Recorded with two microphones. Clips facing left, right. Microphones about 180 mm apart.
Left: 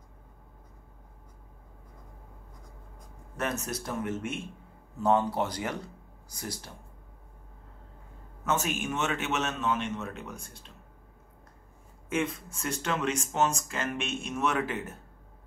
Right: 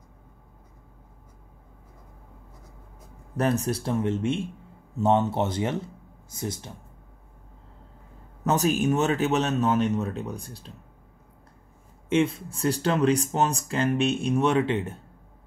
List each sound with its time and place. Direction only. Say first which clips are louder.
3.3 s speech: right 8 dB; 35° right (ahead or behind)
8.5 s speech: right 8 dB; 35° right (ahead or behind)
12.1 s speech: right 7 dB; 30° right (ahead or behind)